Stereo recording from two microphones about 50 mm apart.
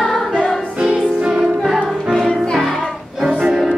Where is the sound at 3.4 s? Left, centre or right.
Centre.